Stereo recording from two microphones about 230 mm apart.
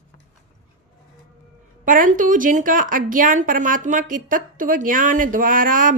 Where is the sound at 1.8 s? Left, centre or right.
Right.